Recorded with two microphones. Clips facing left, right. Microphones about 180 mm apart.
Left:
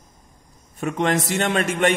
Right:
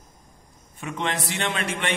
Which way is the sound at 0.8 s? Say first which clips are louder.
Left 7 dB; 45° left (ahead or behind).